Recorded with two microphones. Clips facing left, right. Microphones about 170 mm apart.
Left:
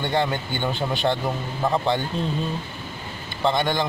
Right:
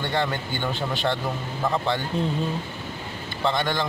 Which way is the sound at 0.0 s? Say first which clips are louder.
Left 2 dB; 20° left (ahead or behind).